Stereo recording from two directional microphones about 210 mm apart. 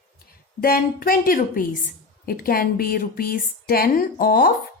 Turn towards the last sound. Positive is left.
turn(degrees=45)  # may be behind; listen again after turning